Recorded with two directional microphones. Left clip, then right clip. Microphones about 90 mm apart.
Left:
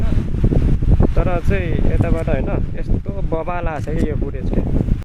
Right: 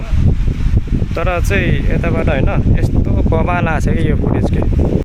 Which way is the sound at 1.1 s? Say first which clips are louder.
Right 5 dB; 40° right (ahead or behind).